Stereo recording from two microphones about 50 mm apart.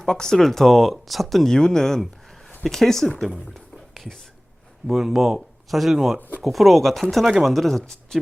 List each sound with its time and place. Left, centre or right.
0.0 s speech: centre
1.5 s speech: centre
3.5 s whispering: centre
4.9 s speech: centre
6.1 s speech: left
6.4 s speech: centre
7.3 s speech: centre
7.5 s speech: centre